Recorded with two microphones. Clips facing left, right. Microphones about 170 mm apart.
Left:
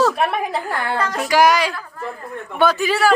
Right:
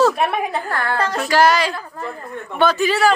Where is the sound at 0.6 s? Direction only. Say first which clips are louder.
Right 1 dB; 15° left (ahead or behind).